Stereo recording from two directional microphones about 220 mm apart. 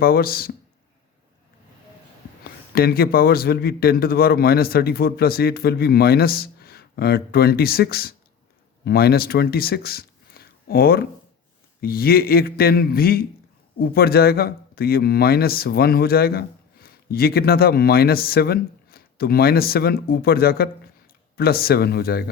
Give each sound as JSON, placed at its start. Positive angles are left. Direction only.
{"t": 0.0, "sound": "speech", "side_deg": 45}
{"t": 2.4, "sound": "speech", "side_deg": 45}